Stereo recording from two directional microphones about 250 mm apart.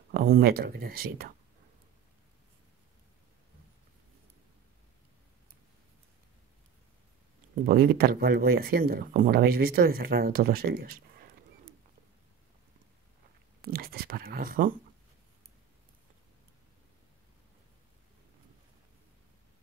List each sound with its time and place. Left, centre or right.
0.1 s speech: right
7.6 s speech: right
13.7 s speech: right